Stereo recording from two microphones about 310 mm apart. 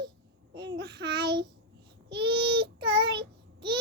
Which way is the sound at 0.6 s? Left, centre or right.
Right.